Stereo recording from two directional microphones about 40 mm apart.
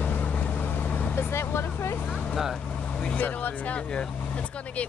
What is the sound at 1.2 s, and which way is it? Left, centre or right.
Vehicle, left.